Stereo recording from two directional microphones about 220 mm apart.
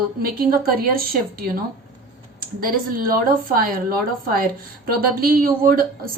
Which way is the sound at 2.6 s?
40° right (ahead or behind).